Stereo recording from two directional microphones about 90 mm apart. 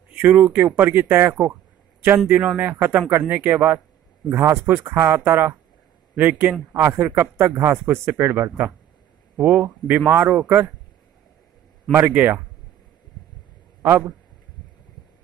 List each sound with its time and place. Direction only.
0.2 s speech: 20° right (ahead or behind)
4.3 s speech: 30° right (ahead or behind)
12.1 s speech: 20° right (ahead or behind)
13.8 s speech: 25° right (ahead or behind)